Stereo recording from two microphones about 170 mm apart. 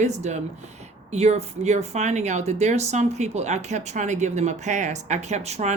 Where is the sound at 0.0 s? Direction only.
40° right (ahead or behind).